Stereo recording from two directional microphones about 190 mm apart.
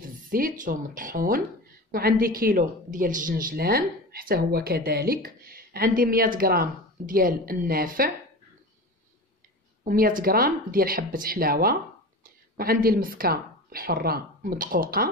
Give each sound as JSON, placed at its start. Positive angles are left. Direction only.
{"t": 0.3, "sound": "a woman's voice", "side_deg": -45}
{"t": 9.8, "sound": "a woman's voice", "side_deg": -50}